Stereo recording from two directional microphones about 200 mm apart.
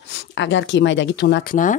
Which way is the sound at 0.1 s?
60° left (ahead or behind).